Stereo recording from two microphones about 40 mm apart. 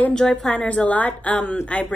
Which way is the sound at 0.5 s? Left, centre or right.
Left.